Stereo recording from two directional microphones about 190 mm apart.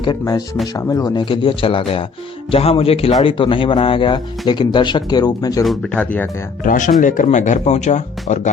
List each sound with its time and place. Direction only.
0.0 s speech: 20° left (ahead or behind)
5.6 s speech: 5° left (ahead or behind)
6.7 s speech: 45° left (ahead or behind)